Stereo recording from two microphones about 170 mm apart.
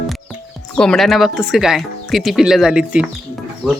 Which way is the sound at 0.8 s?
5° left (ahead or behind).